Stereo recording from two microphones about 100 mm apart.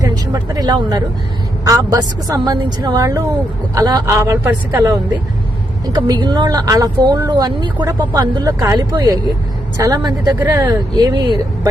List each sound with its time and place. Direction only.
0.1 s speech: 40° right (ahead or behind); by 4.9 s 20° right (ahead or behind)
5.9 s speech: 40° right (ahead or behind)